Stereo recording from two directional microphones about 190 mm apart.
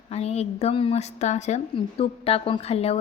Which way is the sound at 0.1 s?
35° left (ahead or behind).